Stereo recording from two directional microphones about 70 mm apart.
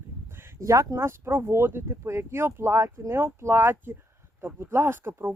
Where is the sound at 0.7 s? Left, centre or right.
Right.